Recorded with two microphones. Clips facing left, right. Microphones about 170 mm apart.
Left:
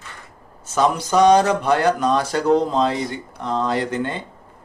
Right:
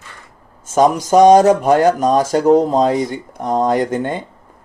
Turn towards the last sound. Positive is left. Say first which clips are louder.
# right 5 dB
turn(degrees=-50)  # may be behind; listen again after turning